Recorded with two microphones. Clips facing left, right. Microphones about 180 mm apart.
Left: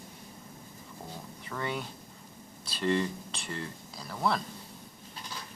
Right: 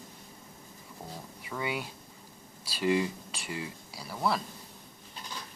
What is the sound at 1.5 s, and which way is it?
Speech, 10° right (ahead or behind).